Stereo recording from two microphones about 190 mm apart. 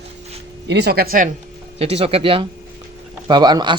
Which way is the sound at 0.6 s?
60° right (ahead or behind).